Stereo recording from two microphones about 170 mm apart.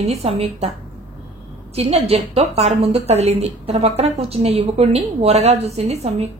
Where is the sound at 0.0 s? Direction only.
40° right (ahead or behind).